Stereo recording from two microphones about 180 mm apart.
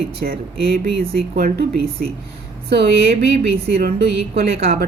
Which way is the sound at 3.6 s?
60° right (ahead or behind).